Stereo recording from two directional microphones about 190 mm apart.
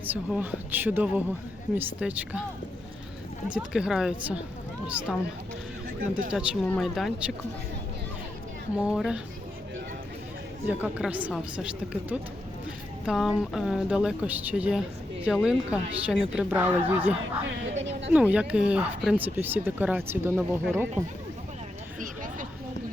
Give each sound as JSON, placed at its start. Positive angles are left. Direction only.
{"t": 0.0, "sound": "speech", "side_deg": -10}
{"t": 3.5, "sound": "a woman's voice", "side_deg": -5}
{"t": 6.0, "sound": "speech", "side_deg": -45}
{"t": 6.3, "sound": "a woman's voice", "side_deg": -5}
{"t": 8.7, "sound": "a woman's voice", "side_deg": -5}
{"t": 10.7, "sound": "a woman's voice", "side_deg": -5}
{"t": 17.7, "sound": "a sound", "side_deg": -75}
{"t": 18.1, "sound": "speech", "side_deg": -5}
{"t": 22.0, "sound": "a sound", "side_deg": -45}